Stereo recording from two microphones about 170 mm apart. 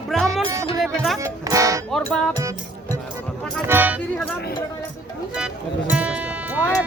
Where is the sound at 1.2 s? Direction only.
20° right (ahead or behind).